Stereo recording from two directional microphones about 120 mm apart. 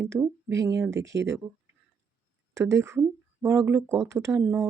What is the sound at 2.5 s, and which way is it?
Speech, 25° right (ahead or behind).